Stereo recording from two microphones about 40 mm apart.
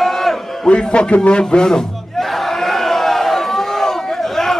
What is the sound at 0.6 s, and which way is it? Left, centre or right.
Speech, left.